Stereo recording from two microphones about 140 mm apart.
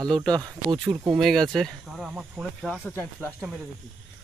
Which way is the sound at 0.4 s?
30° right (ahead or behind).